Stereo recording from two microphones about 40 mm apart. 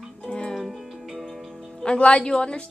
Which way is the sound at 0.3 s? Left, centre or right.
Centre.